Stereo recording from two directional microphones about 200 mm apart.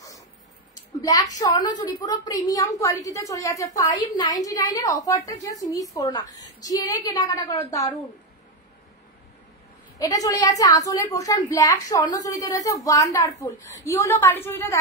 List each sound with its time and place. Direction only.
0.9 s a woman's voice: 15° left (ahead or behind)
9.9 s a woman's voice: 15° left (ahead or behind)